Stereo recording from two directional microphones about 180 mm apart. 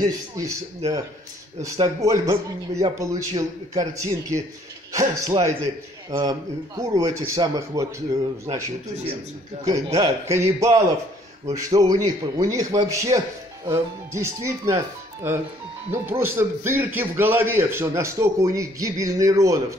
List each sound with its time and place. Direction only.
0.0 s a man's voice: 20° right (ahead or behind)
1.6 s a man's voice: 20° right (ahead or behind)
9.9 s a man's voice: 15° right (ahead or behind)
15.9 s a man's voice: 15° right (ahead or behind)